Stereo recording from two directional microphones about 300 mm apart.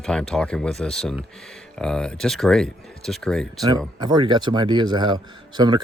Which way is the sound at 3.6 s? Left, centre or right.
Centre.